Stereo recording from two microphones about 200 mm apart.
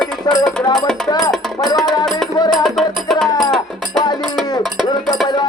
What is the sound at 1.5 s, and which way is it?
Speech, 20° left (ahead or behind).